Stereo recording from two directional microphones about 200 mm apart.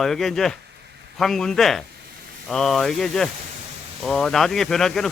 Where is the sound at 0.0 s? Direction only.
Centre (ahead or behind).